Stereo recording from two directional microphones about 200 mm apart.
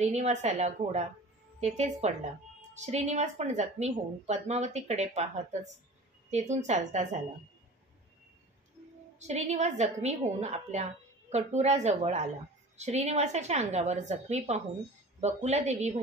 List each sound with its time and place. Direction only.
0.0 s a woman's voice: 35° right (ahead or behind)
9.2 s a woman's voice: 35° right (ahead or behind)